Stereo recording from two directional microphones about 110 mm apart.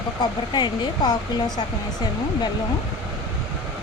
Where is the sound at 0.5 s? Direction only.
40° left (ahead or behind).